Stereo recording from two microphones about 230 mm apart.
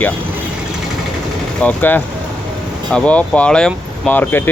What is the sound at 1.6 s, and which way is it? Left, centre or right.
Speech, centre.